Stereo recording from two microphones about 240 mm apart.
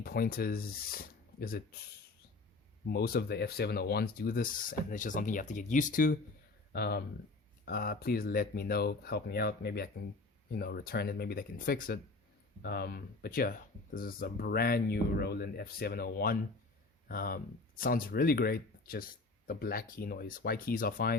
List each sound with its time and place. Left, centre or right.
0.0 s speech: left
2.9 s speech: left